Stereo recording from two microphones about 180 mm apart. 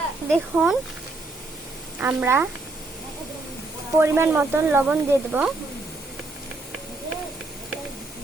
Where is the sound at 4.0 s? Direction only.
15° right (ahead or behind).